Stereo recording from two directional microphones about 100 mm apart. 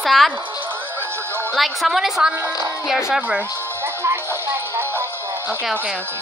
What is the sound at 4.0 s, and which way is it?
Music, 25° right (ahead or behind).